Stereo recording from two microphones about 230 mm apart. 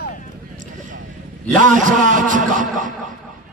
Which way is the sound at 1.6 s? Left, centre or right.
Right.